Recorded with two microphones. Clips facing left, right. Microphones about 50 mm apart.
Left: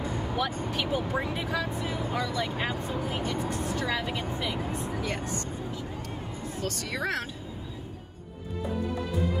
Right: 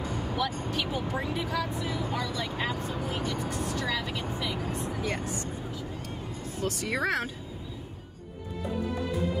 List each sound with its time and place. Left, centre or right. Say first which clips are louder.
0.0 s vehicle: left 1 dB; left
0.7 s speech: left 1 dB; centre
1.1 s speech: left 1 dB; left
2.5 s speech: left 1 dB; centre; by 5.0 s left
5.2 s speech: left 1 dB; centre
6.6 s speech: right 3 dB; centre
6.9 s speech: right 3 dB; right